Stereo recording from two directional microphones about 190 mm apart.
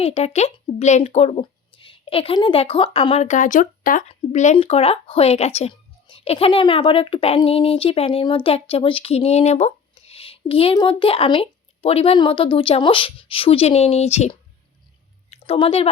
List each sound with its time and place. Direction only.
0.0 s a woman's voice: 35° left (ahead or behind)